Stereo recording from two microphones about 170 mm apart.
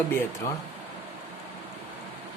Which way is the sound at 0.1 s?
15° left (ahead or behind).